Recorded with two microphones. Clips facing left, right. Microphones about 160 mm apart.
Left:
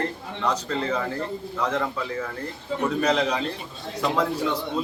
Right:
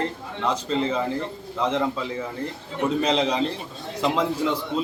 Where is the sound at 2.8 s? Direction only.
25° right (ahead or behind).